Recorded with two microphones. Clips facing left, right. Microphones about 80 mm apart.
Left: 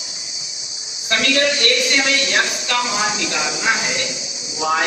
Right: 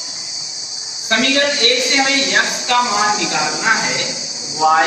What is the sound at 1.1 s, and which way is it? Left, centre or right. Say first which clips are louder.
A woman's voice: right 2 dB; right.